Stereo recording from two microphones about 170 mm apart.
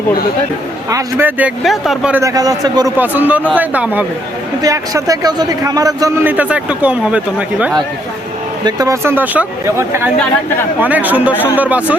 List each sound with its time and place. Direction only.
0.9 s a man's voice: 15° right (ahead or behind)
2.2 s a man's voice: 20° right (ahead or behind)
3.0 s a man's voice: 10° right (ahead or behind)
4.6 s a man's voice: 20° right (ahead or behind)
8.6 s a man's voice: 20° right (ahead or behind)